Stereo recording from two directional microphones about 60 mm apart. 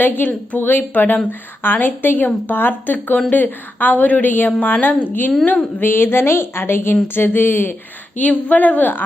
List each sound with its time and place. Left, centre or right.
0.0 s a woman's voice: left
8.2 s a woman's voice: left